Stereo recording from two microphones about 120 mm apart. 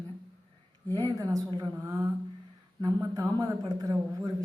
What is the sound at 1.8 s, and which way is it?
Speech, 25° right (ahead or behind).